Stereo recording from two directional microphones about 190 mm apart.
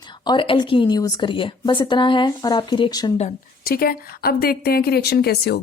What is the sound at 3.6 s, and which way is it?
A woman's voice, 50° left (ahead or behind).